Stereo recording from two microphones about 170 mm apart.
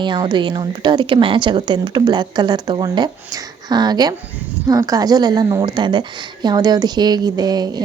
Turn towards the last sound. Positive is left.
turn(degrees=-25)  # may be behind; listen again after turning